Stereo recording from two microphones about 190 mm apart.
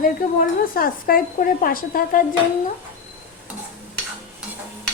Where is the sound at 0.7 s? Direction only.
50° left (ahead or behind).